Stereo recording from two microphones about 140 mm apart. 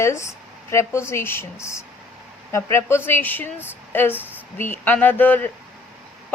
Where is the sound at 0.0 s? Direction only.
20° left (ahead or behind).